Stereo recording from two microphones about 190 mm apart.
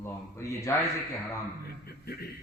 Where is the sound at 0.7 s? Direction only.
15° left (ahead or behind).